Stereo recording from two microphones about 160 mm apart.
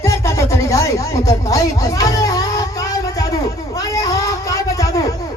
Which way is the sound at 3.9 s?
20° left (ahead or behind).